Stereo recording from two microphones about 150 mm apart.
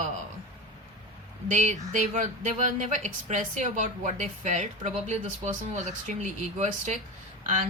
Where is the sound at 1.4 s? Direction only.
55° right (ahead or behind).